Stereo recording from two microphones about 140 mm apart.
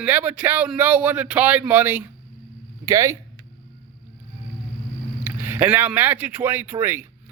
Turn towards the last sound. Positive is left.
turn(degrees=-15)  # may be behind; listen again after turning